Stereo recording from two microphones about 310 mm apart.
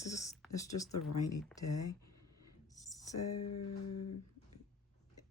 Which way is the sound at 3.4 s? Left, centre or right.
Left.